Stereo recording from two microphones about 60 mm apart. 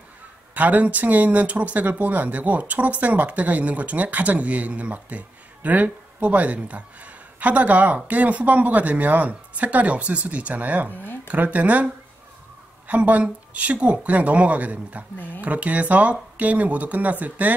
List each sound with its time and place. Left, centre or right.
0.6 s speech: right